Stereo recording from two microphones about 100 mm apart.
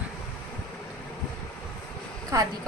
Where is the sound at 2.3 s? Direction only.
35° right (ahead or behind).